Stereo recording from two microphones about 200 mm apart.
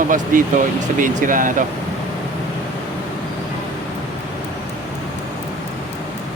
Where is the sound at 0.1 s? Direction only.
40° right (ahead or behind).